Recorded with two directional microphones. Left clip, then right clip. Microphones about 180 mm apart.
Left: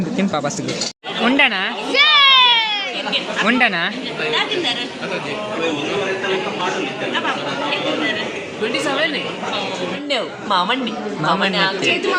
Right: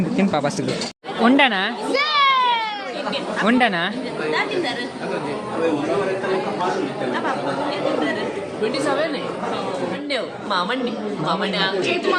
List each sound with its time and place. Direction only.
0.2 s speech: centre (ahead or behind)
1.2 s speech: 15° right (ahead or behind)
10.1 s a woman's voice: 45° left (ahead or behind)